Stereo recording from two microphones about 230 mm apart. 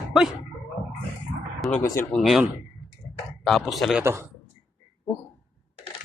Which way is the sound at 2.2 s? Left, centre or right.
Centre.